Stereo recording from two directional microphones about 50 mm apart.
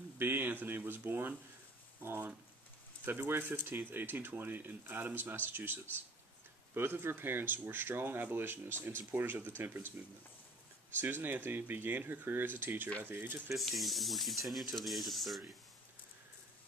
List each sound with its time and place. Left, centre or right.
0.2 s speech: right
11.0 s speech: right
13.6 s speech: centre